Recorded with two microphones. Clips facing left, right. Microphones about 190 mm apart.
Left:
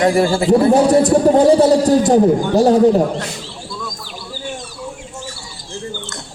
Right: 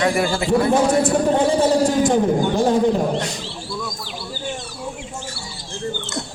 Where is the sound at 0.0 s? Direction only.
30° left (ahead or behind).